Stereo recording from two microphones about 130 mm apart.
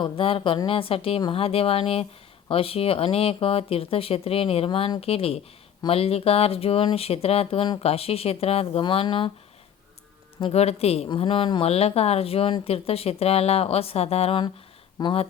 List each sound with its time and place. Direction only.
0.0 s speech: 45° left (ahead or behind)
10.4 s speech: 55° left (ahead or behind)
11.7 s speech: 50° left (ahead or behind)
15.0 s speech: 35° left (ahead or behind)